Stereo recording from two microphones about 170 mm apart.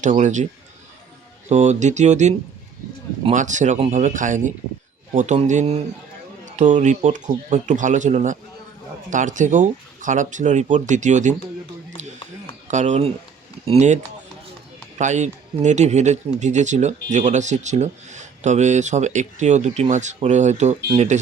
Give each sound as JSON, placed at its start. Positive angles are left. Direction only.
{"t": 0.0, "sound": "speech", "side_deg": -45}
{"t": 1.5, "sound": "speech", "side_deg": -45}
{"t": 3.3, "sound": "speech", "side_deg": -45}
{"t": 12.0, "sound": "chop", "side_deg": -45}
{"t": 12.6, "sound": "speech", "side_deg": -45}